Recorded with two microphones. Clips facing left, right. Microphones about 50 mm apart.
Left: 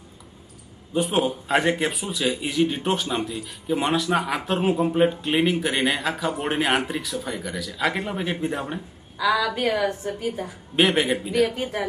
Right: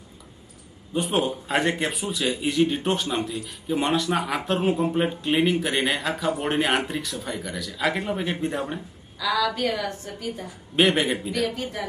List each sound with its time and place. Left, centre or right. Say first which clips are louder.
0.9 s a man's voice: left 2 dB; centre
9.1 s a woman's voice: left 2 dB; left
10.8 s a man's voice: left 1 dB; centre
11.5 s a woman's voice: left 3 dB; left